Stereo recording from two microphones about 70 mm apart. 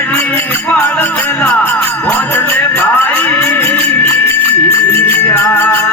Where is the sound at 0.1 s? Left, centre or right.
Left.